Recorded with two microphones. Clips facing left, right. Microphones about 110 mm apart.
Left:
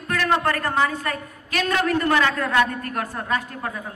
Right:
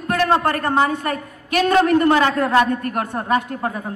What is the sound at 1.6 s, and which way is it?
A man's voice, 25° right (ahead or behind).